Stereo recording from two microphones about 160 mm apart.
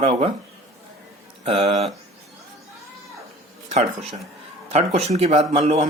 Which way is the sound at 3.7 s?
45° right (ahead or behind).